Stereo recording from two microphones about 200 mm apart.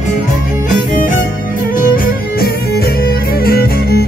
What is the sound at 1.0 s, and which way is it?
Music, 40° left (ahead or behind).